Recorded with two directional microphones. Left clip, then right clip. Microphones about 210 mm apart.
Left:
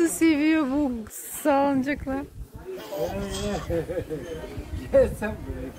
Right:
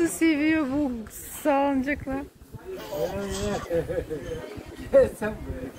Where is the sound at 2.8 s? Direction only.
5° left (ahead or behind).